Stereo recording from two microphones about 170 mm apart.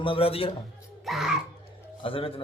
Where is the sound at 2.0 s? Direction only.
30° left (ahead or behind).